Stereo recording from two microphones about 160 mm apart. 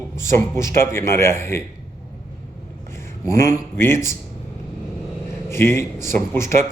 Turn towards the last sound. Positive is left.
turn(degrees=15)  # may be behind; listen again after turning